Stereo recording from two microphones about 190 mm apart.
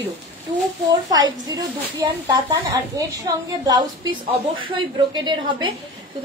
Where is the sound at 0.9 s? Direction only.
20° right (ahead or behind).